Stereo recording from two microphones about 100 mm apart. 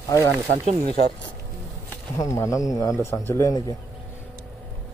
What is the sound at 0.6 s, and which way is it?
Speech, 80° right.